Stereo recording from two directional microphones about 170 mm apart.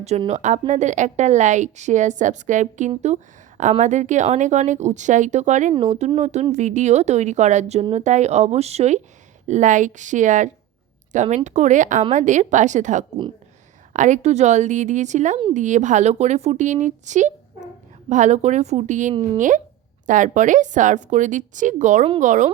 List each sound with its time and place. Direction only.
0.3 s a woman's voice: 45° right (ahead or behind)
19.1 s speech: 30° right (ahead or behind)
19.4 s a woman's voice: 50° right (ahead or behind)